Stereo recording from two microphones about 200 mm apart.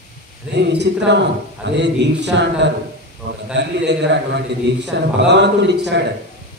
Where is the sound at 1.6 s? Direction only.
60° right (ahead or behind).